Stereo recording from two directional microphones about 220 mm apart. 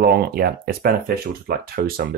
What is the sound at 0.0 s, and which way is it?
Speech, 45° right (ahead or behind).